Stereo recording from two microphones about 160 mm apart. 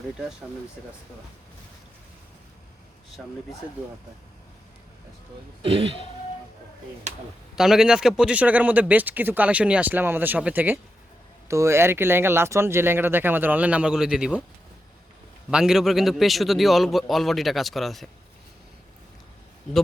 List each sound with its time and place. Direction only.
5.6 s speech: 35° right (ahead or behind)
7.5 s speech: 5° right (ahead or behind)
15.4 s a man's voice: 5° right (ahead or behind)